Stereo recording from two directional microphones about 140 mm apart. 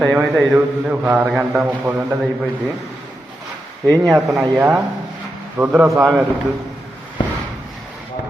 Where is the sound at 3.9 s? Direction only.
25° right (ahead or behind).